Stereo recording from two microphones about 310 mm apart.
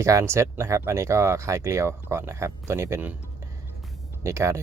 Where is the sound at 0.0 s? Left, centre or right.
Centre.